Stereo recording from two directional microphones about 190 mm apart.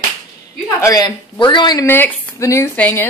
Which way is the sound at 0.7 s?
15° left (ahead or behind).